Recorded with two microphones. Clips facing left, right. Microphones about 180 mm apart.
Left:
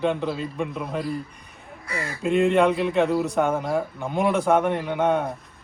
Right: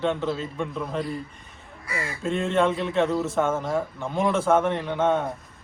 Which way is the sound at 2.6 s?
Centre (ahead or behind).